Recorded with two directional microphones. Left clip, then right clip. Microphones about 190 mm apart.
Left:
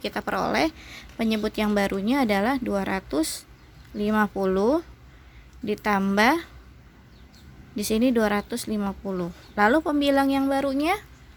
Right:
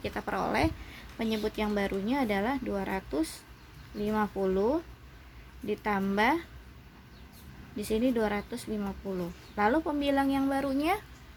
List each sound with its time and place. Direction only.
0.0 s a woman's voice: 45° left (ahead or behind)
7.8 s a woman's voice: 55° left (ahead or behind); by 11.0 s 40° left (ahead or behind)